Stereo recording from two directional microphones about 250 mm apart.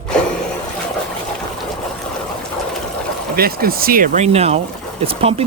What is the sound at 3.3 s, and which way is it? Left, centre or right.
Speech, right.